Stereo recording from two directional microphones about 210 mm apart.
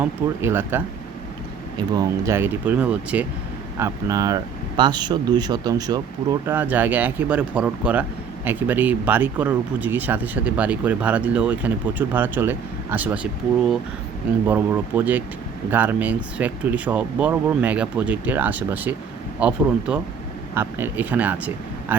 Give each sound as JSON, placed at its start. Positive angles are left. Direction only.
{"t": 0.0, "sound": "speech", "side_deg": -10}
{"t": 2.0, "sound": "speech", "side_deg": -15}
{"t": 14.4, "sound": "speech", "side_deg": -10}